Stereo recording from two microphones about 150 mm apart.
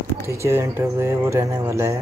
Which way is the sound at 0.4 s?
15° right (ahead or behind).